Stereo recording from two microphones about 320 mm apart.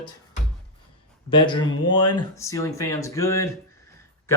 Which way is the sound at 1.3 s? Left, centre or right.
Centre.